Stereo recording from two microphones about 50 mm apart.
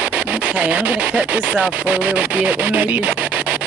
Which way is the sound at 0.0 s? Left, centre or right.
Right.